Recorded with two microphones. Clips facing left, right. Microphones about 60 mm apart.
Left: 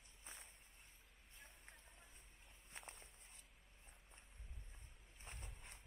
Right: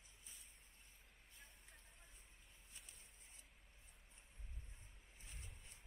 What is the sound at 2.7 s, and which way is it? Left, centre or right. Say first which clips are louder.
Walk: left 9 dB; left.